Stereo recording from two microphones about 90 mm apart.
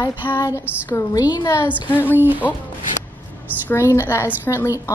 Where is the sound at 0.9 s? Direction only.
45° left (ahead or behind).